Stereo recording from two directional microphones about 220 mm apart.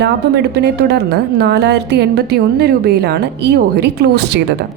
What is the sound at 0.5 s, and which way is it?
A woman's voice, 50° right (ahead or behind).